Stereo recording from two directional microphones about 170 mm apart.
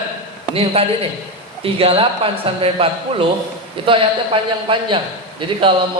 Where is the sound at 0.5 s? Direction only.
35° right (ahead or behind).